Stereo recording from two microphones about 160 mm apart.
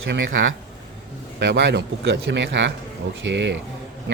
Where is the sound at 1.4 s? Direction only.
90° right.